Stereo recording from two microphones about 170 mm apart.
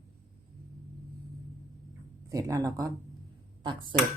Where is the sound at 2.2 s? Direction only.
20° right (ahead or behind).